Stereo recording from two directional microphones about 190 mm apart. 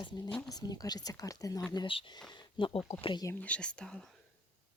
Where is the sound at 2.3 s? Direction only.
25° left (ahead or behind).